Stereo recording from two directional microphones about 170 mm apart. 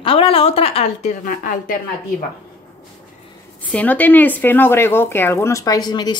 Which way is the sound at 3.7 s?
10° left (ahead or behind).